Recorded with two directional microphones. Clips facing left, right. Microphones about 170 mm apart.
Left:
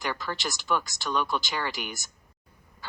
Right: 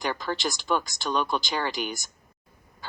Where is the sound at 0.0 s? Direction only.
25° right (ahead or behind).